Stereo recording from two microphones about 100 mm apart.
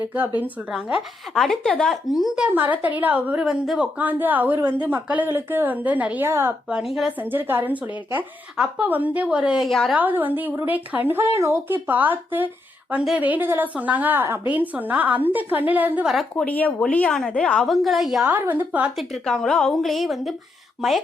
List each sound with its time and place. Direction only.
0.7 s a woman's voice: 10° right (ahead or behind)
1.3 s a woman's voice: 5° left (ahead or behind)
2.6 s a woman's voice: 15° right (ahead or behind)
6.7 s a woman's voice: 5° right (ahead or behind)
7.2 s a woman's voice: 20° right (ahead or behind)
9.6 s a woman's voice: 5° left (ahead or behind)
9.9 s a woman's voice: 15° right (ahead or behind)
16.5 s a woman's voice: 15° left (ahead or behind); by 18.3 s centre (ahead or behind)
18.3 s a woman's voice: 15° right (ahead or behind)
18.9 s a woman's voice: centre (ahead or behind)